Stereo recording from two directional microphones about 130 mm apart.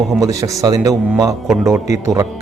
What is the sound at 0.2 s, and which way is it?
Speech, 25° right (ahead or behind).